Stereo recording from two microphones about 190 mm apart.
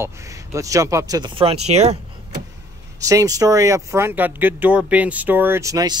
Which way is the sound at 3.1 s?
20° right (ahead or behind).